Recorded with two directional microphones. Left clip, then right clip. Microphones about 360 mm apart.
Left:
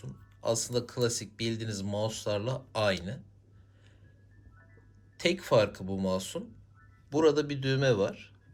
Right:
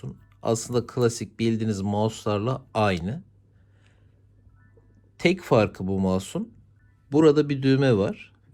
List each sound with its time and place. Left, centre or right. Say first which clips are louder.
0.0 s speech: right 4 dB; centre
5.1 s speech: right 5 dB; centre